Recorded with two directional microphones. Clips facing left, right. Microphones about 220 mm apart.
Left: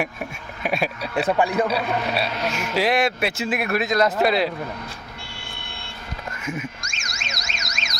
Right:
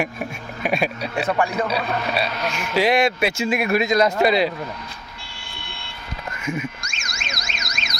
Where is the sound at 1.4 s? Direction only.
15° left (ahead or behind).